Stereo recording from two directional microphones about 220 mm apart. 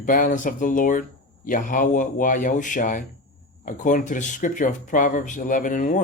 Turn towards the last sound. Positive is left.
turn(degrees=35)  # may be behind; listen again after turning